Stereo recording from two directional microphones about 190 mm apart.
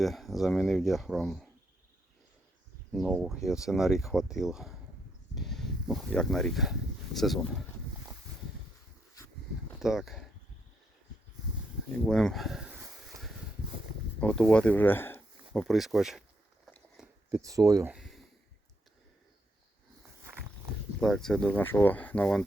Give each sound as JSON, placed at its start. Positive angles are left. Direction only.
{"t": 0.0, "sound": "speech", "side_deg": 0}
{"t": 2.9, "sound": "speech", "side_deg": 0}
{"t": 9.8, "sound": "speech", "side_deg": 0}
{"t": 12.0, "sound": "a sound", "side_deg": 5}
{"t": 14.2, "sound": "speech", "side_deg": 5}
{"t": 15.5, "sound": "speech", "side_deg": 0}
{"t": 17.0, "sound": "a sound", "side_deg": -5}
{"t": 17.3, "sound": "speech", "side_deg": -15}
{"t": 17.9, "sound": "a sound", "side_deg": 0}
{"t": 21.0, "sound": "speech", "side_deg": 0}